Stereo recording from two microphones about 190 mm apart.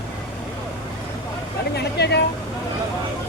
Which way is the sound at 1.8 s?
60° left (ahead or behind).